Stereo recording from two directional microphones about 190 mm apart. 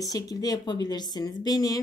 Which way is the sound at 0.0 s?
20° left (ahead or behind).